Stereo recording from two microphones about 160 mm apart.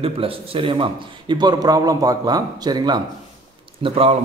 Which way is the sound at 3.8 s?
40° right (ahead or behind).